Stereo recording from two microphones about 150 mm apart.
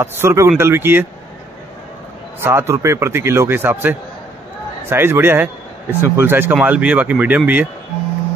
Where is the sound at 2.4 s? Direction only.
20° right (ahead or behind).